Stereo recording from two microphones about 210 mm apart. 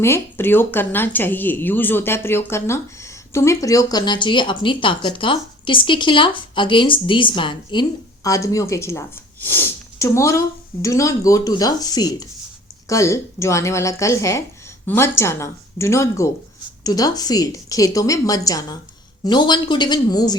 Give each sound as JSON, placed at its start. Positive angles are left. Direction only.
{"t": 0.0, "sound": "a woman's voice", "side_deg": 10}